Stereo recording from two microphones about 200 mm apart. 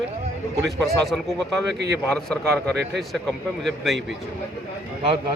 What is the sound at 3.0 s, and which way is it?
Speech, centre (ahead or behind).